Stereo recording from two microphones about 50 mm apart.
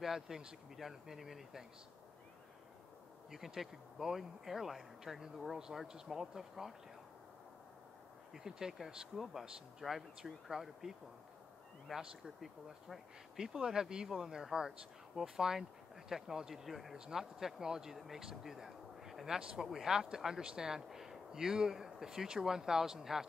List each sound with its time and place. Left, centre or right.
0.0 s speech: centre
3.3 s speech: centre
8.3 s speech: centre